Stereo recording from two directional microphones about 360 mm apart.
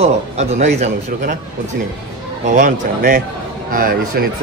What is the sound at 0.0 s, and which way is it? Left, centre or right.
Speech, centre.